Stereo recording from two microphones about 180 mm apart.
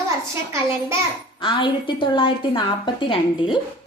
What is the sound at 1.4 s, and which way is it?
A woman's voice, 25° left (ahead or behind).